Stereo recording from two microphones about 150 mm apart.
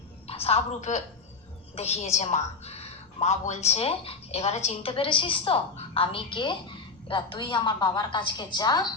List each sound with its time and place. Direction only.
0.3 s a woman's voice: 40° left (ahead or behind)